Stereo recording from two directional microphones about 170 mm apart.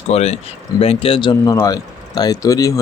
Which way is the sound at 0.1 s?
40° left (ahead or behind).